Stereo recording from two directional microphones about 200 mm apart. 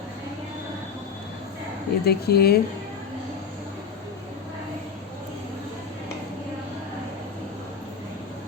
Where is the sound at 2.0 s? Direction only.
50° left (ahead or behind).